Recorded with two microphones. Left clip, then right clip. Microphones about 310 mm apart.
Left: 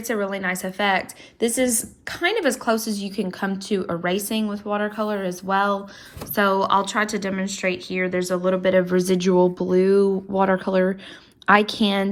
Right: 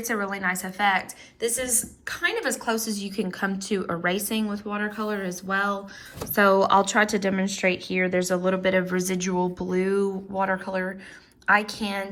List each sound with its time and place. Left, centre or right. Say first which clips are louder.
0.0 s a woman's voice: left 2 dB; centre